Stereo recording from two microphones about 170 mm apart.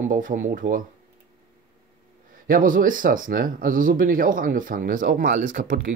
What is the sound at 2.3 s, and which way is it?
Speech, 50° right (ahead or behind).